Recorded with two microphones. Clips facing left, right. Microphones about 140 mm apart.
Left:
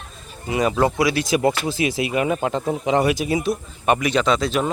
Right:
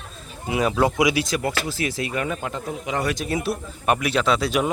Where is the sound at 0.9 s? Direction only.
15° right (ahead or behind).